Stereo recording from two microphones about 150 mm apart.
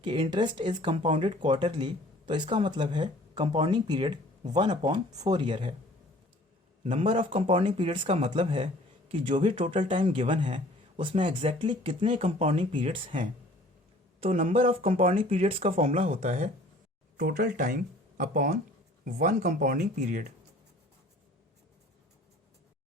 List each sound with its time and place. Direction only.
0.0 s speech: 35° right (ahead or behind)
7.0 s speech: 35° right (ahead or behind)
12.2 s speech: 45° right (ahead or behind)
14.5 s speech: 40° right (ahead or behind)
14.8 s speech: 55° right (ahead or behind)
15.2 s speech: 40° right (ahead or behind)
17.2 s speech: 70° right (ahead or behind)